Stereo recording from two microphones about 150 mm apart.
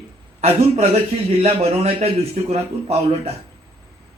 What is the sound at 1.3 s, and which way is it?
A man's voice, 45° right (ahead or behind).